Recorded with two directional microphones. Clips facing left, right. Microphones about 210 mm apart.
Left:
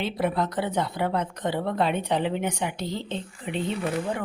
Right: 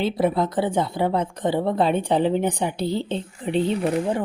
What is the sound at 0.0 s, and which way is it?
A woman's voice, 30° right (ahead or behind).